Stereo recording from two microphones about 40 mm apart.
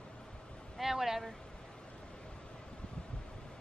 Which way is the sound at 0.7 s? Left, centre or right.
Centre.